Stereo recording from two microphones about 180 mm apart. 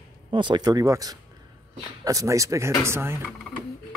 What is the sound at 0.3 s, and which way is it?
Speech, 25° right (ahead or behind).